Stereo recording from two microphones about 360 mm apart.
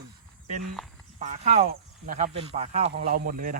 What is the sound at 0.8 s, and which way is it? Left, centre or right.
Speech, centre.